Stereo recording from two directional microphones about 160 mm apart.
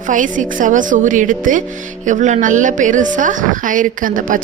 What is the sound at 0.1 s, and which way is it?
A woman's voice, 55° right (ahead or behind).